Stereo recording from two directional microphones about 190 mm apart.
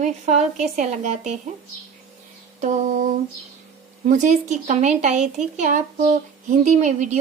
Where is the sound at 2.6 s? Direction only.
45° right (ahead or behind).